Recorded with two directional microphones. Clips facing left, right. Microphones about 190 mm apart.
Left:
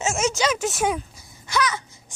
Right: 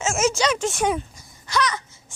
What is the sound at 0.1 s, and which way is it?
Speech, centre (ahead or behind).